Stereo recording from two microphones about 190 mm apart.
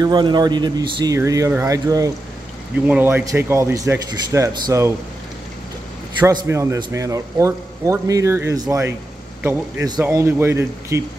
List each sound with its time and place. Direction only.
0.0 s a man's voice: 20° right (ahead or behind)
6.2 s a man's voice: 15° right (ahead or behind)
10.0 s a man's voice: 15° right (ahead or behind)